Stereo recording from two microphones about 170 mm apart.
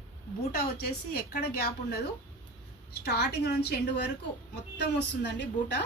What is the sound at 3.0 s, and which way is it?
A woman's voice, 75° left (ahead or behind).